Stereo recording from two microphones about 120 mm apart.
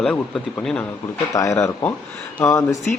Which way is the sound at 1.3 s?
25° left (ahead or behind).